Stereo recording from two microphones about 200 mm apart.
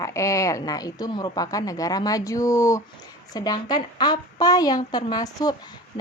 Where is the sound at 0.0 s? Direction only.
15° left (ahead or behind).